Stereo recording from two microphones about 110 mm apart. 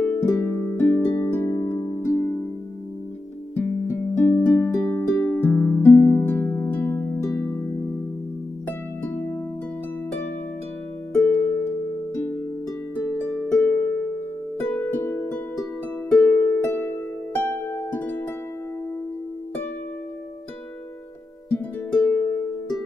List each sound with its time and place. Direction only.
0.0 s harp: 20° left (ahead or behind)
3.5 s music: 20° left (ahead or behind)
11.2 s harp: 20° left (ahead or behind)
12.2 s music: 20° left (ahead or behind)
12.9 s harp: 20° left (ahead or behind)
14.6 s music: 20° left (ahead or behind)
16.1 s music: 10° left (ahead or behind)
16.3 s harp: 15° left (ahead or behind)
22.1 s music: 20° left (ahead or behind)